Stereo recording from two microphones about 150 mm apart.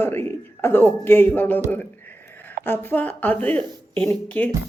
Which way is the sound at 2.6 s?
15° left (ahead or behind).